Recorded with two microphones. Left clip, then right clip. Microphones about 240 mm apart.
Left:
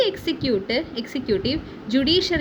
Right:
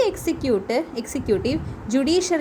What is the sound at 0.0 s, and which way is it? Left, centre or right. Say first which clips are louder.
A woman's voice: even; centre.